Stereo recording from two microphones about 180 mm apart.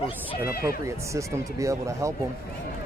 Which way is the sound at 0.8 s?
15° right (ahead or behind).